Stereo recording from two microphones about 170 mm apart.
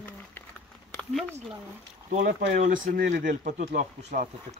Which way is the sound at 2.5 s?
50° right (ahead or behind).